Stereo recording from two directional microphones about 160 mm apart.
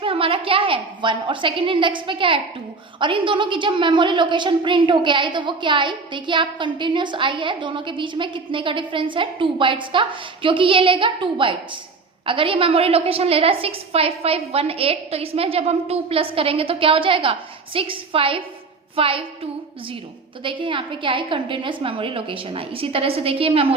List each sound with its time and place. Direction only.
0.0 s a woman's voice: 35° right (ahead or behind)